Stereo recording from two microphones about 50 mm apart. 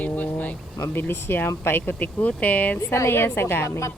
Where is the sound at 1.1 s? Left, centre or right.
Left.